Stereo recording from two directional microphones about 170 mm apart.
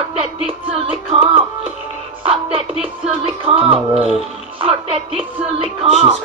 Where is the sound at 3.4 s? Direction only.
35° right (ahead or behind).